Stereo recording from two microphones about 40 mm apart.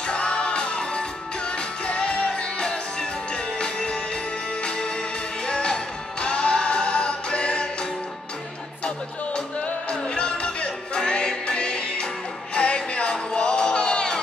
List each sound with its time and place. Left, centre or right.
0.0 s music: left
8.8 s music: left